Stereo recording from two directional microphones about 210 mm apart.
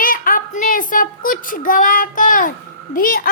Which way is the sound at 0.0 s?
40° left (ahead or behind).